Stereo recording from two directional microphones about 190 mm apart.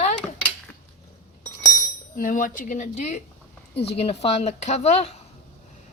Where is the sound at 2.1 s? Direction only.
45° left (ahead or behind).